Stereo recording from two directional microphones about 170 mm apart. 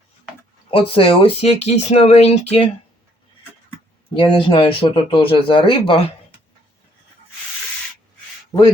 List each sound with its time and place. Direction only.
0.7 s speech: 30° left (ahead or behind)
4.1 s speech: 30° left (ahead or behind)
8.5 s a man's voice: 20° left (ahead or behind)